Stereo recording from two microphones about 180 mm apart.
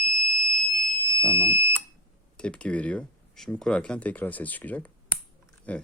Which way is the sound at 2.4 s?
5° left (ahead or behind).